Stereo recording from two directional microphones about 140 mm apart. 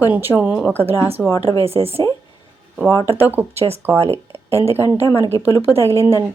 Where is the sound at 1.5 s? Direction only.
45° right (ahead or behind).